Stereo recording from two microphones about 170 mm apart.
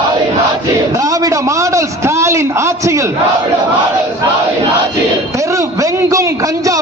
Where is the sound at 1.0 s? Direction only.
20° right (ahead or behind).